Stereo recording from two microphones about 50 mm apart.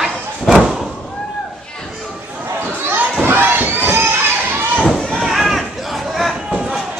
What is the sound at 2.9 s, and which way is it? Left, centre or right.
Children playing, right.